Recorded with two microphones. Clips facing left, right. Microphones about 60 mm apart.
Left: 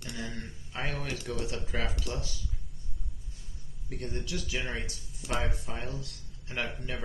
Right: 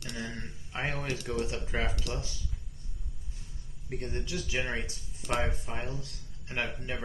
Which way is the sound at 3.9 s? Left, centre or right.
Right.